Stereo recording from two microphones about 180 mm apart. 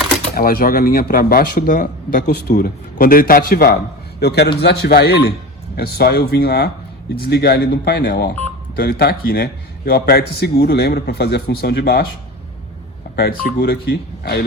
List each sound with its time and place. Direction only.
0.3 s a man's voice: 55° left (ahead or behind)
13.1 s a man's voice: 60° left (ahead or behind)